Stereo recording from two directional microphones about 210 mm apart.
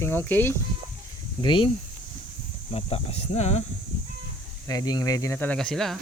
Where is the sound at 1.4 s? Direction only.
25° left (ahead or behind).